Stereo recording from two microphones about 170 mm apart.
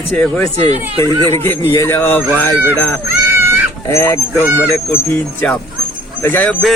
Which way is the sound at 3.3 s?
10° right (ahead or behind).